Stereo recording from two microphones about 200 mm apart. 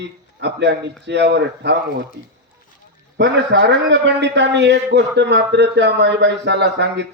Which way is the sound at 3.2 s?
60° right (ahead or behind).